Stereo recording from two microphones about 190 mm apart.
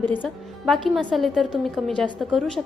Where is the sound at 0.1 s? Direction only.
5° left (ahead or behind).